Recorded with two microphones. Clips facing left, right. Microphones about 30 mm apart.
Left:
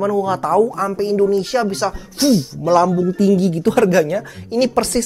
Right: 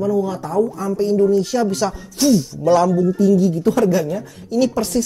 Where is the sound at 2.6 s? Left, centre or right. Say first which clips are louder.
Left 1 dB; centre.